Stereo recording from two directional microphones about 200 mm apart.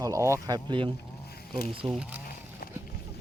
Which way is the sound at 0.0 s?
15° right (ahead or behind).